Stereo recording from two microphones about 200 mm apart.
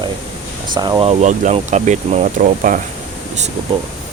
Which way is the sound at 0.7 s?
20° right (ahead or behind).